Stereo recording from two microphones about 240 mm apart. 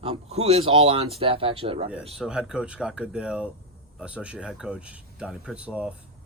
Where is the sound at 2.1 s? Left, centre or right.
Centre.